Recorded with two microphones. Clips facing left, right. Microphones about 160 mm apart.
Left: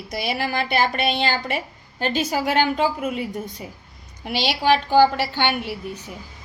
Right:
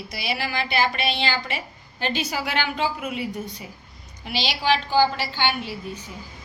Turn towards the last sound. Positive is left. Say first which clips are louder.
# left 3 dB
turn(degrees=60)  # may be behind; listen again after turning